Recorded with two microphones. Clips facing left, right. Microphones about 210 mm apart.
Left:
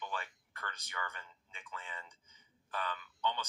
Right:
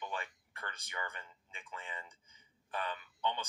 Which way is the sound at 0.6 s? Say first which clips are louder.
Even; 25° right (ahead or behind).